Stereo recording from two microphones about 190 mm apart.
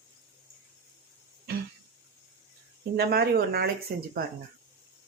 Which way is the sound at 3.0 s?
55° right (ahead or behind).